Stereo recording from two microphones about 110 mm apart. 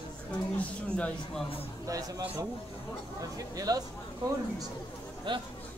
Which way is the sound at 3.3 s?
35° right (ahead or behind).